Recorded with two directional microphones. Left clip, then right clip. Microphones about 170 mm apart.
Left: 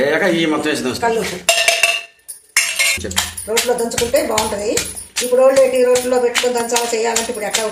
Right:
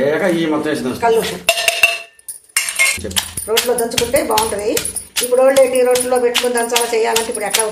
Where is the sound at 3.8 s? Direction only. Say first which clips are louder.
Right 1 dB; centre (ahead or behind).